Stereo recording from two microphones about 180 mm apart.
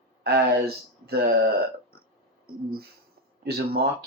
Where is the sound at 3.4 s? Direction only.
60° right (ahead or behind).